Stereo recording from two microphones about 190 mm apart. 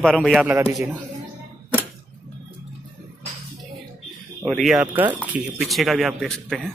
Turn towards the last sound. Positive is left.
turn(degrees=5)  # may be behind; listen again after turning